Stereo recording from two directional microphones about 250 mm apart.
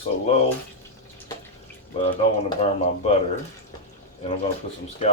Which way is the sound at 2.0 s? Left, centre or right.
Left.